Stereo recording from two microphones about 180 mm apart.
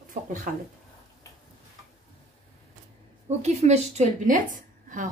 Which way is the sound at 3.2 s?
40° right (ahead or behind).